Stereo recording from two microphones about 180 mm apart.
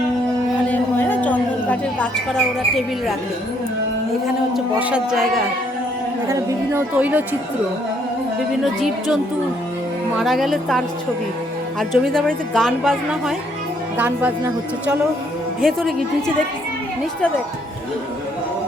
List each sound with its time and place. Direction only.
0.7 s a sound: 10° left (ahead or behind)
4.8 s a woman's voice: 5° right (ahead or behind)
6.2 s speech: 15° right (ahead or behind)
8.6 s a woman's voice: centre (ahead or behind)
10.2 s a woman's voice: centre (ahead or behind)
15.6 s a woman's voice: centre (ahead or behind)